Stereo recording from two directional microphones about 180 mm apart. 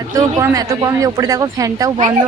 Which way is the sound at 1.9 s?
30° right (ahead or behind).